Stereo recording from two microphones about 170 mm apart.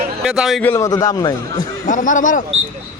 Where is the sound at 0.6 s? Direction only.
15° left (ahead or behind).